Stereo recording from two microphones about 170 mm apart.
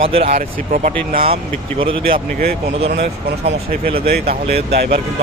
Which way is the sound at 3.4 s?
35° right (ahead or behind).